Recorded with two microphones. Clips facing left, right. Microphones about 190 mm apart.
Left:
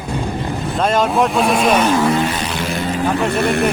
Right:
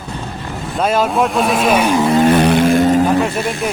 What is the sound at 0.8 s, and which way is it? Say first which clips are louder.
Speech: right 1 dB; 5° right (ahead or behind).